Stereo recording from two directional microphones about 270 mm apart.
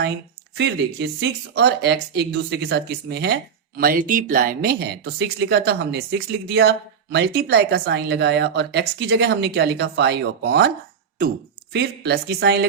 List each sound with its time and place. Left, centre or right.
0.5 s speech: right
11.7 s speech: right